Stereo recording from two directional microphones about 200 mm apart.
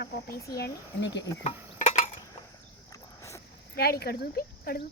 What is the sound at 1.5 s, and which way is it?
Stir, 35° left (ahead or behind).